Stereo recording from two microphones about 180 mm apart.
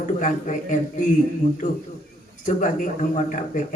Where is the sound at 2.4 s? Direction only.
45° left (ahead or behind).